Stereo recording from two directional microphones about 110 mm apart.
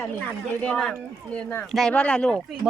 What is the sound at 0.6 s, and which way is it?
Speech, 5° left (ahead or behind).